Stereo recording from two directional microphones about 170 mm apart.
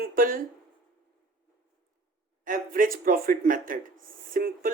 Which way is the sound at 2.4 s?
50° right (ahead or behind).